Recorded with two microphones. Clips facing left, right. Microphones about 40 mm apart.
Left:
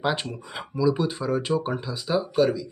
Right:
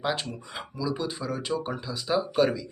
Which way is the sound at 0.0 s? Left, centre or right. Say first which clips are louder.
Left 3 dB; centre.